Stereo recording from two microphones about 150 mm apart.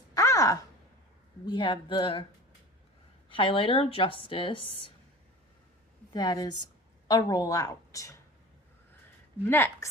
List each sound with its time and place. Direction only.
0.2 s a sound: 20° left (ahead or behind)
1.5 s speech: 30° left (ahead or behind)
3.2 s speech: 35° left (ahead or behind)
6.1 s a woman's voice: 25° left (ahead or behind)
9.5 s a woman's voice: 15° left (ahead or behind)